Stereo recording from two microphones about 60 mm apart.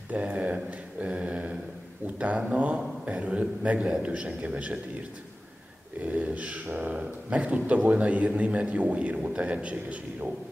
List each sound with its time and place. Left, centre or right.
0.1 s mantra: right
2.1 s a man's voice: right
6.0 s a man's voice: right